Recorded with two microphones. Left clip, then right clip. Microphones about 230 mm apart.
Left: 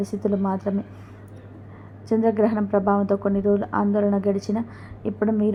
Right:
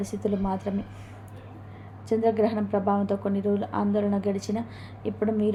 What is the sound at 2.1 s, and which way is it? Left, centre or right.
A woman's voice, centre.